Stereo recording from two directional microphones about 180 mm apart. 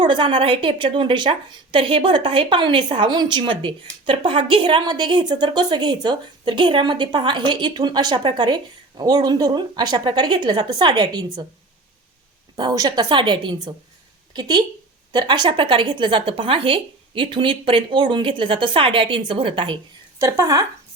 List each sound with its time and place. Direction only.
0.0 s a woman's voice: 25° right (ahead or behind)
12.5 s a woman's voice: 20° right (ahead or behind)
20.1 s speech: 15° right (ahead or behind)